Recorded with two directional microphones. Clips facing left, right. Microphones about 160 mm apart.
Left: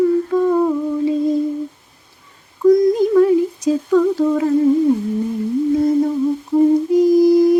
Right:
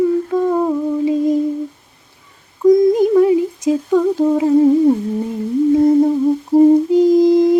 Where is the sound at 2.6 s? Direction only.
20° right (ahead or behind).